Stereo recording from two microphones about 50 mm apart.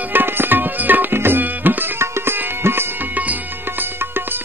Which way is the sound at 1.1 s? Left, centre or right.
Right.